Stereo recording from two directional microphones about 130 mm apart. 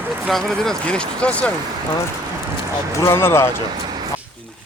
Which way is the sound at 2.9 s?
20° left (ahead or behind).